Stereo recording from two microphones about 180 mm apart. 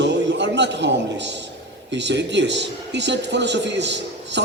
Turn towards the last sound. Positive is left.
turn(degrees=-75)  # may be behind; listen again after turning